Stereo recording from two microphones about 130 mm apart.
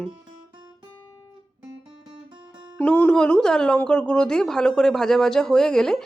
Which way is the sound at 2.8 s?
15° left (ahead or behind).